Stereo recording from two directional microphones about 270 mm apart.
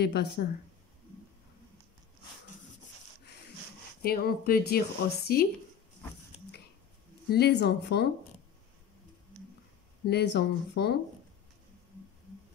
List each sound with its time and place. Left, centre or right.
0.0 s speech: left
4.0 s speech: left
7.2 s speech: left
10.0 s speech: left